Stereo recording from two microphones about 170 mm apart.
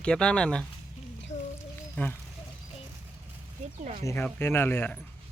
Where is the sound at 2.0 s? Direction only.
10° left (ahead or behind).